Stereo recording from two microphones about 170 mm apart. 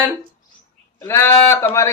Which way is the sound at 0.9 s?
15° left (ahead or behind).